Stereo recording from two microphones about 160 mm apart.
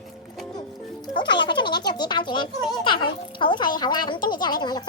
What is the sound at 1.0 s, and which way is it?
A child's voice, 30° left (ahead or behind).